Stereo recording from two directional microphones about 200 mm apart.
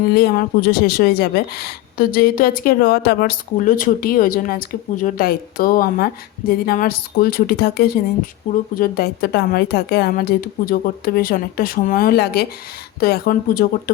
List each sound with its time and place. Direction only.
0.1 s speech: 50° left (ahead or behind)